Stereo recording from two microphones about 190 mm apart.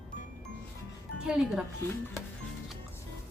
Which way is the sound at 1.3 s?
5° right (ahead or behind).